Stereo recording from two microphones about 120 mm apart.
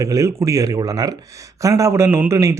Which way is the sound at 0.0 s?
25° right (ahead or behind).